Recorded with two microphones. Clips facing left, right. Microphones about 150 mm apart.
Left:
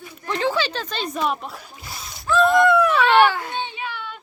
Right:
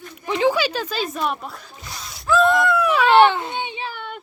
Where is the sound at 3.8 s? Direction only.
50° right (ahead or behind).